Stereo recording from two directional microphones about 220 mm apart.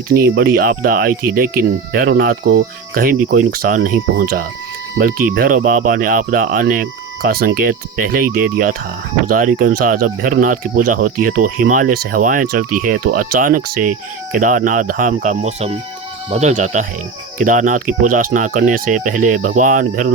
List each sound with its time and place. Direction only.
0.1 s speech: 45° right (ahead or behind)